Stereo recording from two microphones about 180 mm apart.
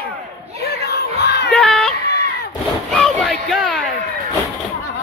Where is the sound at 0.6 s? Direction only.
65° left (ahead or behind).